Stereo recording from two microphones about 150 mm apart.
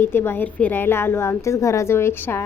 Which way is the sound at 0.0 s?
15° left (ahead or behind).